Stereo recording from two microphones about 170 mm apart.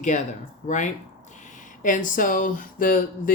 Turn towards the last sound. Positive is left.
turn(degrees=50)  # may be behind; listen again after turning